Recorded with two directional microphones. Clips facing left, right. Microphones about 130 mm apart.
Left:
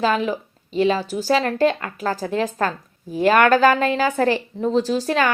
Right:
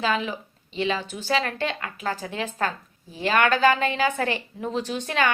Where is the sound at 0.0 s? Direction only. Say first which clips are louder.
Left 5 dB; 40° left (ahead or behind).